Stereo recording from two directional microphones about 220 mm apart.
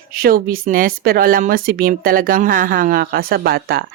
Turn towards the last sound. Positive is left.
turn(degrees=-45)  # may be behind; listen again after turning